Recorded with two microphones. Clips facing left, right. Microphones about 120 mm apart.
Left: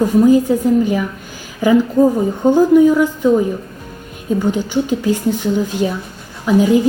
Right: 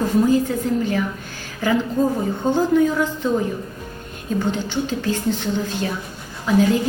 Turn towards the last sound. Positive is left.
turn(degrees=15)  # may be behind; listen again after turning